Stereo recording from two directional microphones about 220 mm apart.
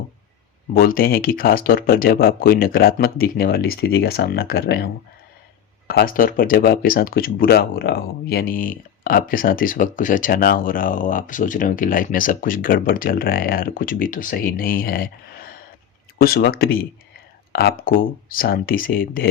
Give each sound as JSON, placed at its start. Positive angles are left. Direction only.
{"t": 0.7, "sound": "speech", "side_deg": 40}
{"t": 5.9, "sound": "speech", "side_deg": 45}